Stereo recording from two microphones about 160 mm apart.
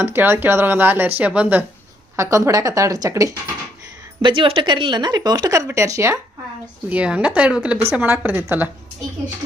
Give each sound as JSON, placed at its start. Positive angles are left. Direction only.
{"t": 0.0, "sound": "speech", "side_deg": -15}
{"t": 2.1, "sound": "speech", "side_deg": -20}
{"t": 4.2, "sound": "speech", "side_deg": -35}
{"t": 6.9, "sound": "speech", "side_deg": -5}